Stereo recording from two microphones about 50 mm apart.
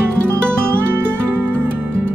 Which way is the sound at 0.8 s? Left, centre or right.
Right.